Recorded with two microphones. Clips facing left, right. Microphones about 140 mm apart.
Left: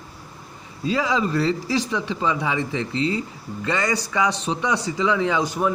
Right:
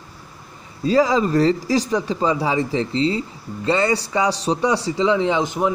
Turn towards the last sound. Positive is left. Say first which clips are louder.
# right 2 dB
turn(degrees=-20)  # may be behind; listen again after turning